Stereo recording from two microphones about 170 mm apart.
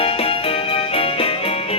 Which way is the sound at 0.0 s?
35° left (ahead or behind).